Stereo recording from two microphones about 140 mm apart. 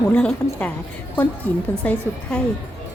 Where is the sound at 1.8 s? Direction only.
10° left (ahead or behind).